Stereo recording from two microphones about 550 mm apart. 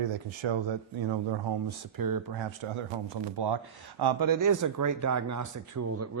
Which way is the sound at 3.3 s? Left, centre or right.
Right.